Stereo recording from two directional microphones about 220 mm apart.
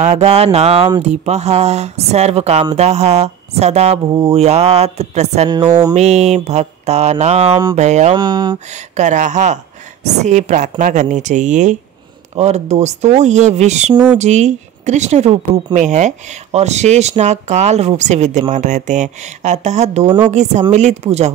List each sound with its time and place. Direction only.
0.0 s speech: 30° right (ahead or behind)
5.5 s a sound: 20° right (ahead or behind)
5.9 s speech: 30° right (ahead or behind)
8.2 s speech: 20° right (ahead or behind)
8.7 s speech: 30° right (ahead or behind)